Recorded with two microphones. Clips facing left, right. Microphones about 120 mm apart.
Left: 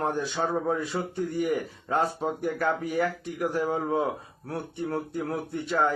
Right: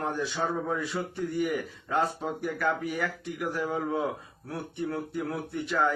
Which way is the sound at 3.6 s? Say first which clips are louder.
Left 3 dB; 25° left (ahead or behind).